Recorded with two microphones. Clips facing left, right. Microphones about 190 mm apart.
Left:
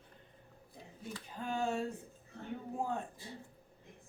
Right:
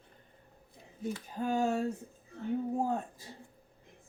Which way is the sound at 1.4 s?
40° right (ahead or behind).